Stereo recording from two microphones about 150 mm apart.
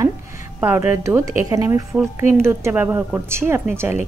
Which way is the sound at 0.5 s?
15° right (ahead or behind).